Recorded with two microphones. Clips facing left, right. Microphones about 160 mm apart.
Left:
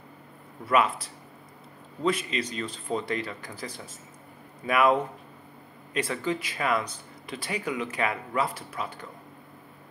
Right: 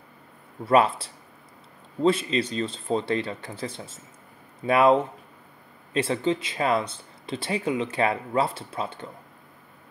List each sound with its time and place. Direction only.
0.7 s speech: 30° right (ahead or behind)